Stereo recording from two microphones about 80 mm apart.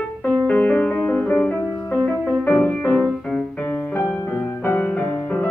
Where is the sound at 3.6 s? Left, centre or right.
Left.